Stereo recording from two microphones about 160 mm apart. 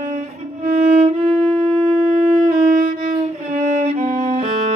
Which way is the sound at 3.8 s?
50° right (ahead or behind).